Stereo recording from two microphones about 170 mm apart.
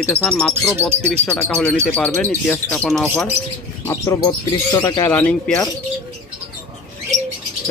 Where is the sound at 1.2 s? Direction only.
5° left (ahead or behind).